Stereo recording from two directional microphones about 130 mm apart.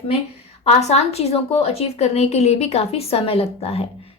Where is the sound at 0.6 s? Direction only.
55° left (ahead or behind).